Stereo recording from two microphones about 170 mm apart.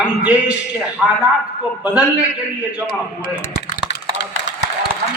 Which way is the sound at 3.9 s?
90° left.